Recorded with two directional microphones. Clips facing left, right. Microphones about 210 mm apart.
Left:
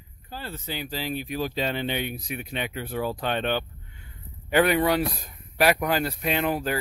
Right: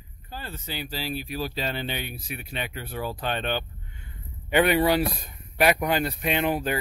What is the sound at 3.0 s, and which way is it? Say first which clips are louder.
Speech: left 3 dB; 10° right (ahead or behind).